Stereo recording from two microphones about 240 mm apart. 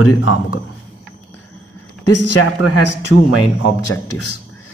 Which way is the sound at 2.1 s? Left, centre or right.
Left.